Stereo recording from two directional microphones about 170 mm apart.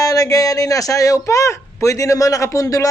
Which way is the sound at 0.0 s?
20° left (ahead or behind).